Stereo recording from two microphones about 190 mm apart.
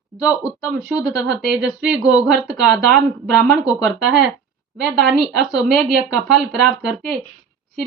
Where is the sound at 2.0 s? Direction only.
20° left (ahead or behind).